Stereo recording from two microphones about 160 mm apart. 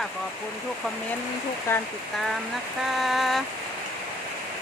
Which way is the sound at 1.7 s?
15° left (ahead or behind).